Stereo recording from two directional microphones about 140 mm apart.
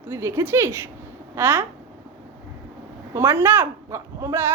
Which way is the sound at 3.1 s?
15° right (ahead or behind).